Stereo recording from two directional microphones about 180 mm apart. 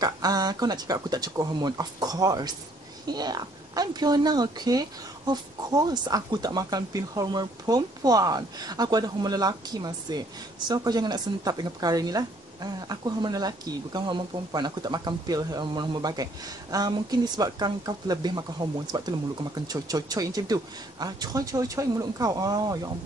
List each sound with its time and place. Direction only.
0.0 s speech: 20° right (ahead or behind)